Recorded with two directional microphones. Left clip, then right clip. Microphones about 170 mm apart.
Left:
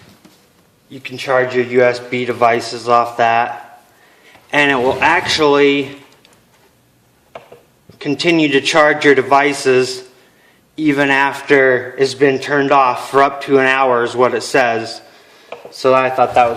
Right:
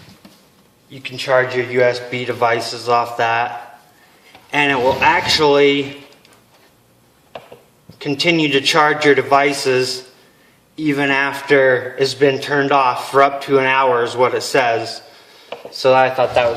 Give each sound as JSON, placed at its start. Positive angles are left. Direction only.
{"t": 0.9, "sound": "a man's voice", "side_deg": 50}
{"t": 4.5, "sound": "a man's voice", "side_deg": 50}
{"t": 7.9, "sound": "a man's voice", "side_deg": 50}